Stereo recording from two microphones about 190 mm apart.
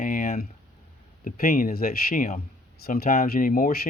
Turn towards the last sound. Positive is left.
turn(degrees=45)  # may be behind; listen again after turning